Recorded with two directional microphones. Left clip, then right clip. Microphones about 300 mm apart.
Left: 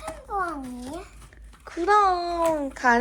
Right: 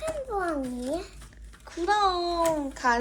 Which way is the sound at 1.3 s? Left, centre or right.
Centre.